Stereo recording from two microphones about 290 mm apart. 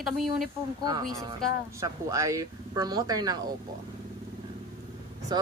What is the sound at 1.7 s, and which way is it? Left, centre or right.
Speech, centre.